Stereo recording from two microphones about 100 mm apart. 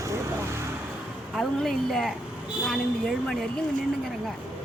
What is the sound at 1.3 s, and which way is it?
Speech, centre (ahead or behind).